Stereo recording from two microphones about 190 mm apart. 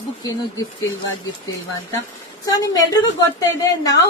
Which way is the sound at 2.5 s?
20° left (ahead or behind).